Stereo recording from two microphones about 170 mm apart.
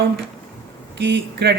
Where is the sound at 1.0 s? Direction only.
85° right.